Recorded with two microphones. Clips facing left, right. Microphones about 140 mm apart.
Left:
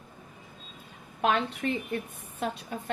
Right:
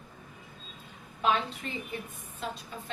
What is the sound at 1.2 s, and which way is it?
A woman's voice, 60° left (ahead or behind).